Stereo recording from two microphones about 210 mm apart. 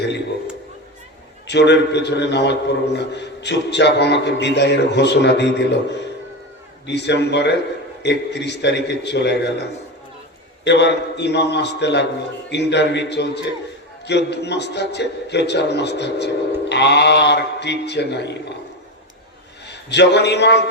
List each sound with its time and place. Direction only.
1.5 s a man's voice: 55° left (ahead or behind)
6.8 s a man's voice: 55° left (ahead or behind)
19.6 s a man's voice: 55° left (ahead or behind)